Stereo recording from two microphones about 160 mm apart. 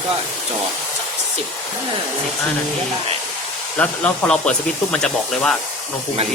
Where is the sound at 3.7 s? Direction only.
5° left (ahead or behind).